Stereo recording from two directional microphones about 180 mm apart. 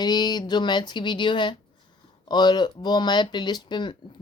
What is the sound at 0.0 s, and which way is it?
Speech, 20° left (ahead or behind).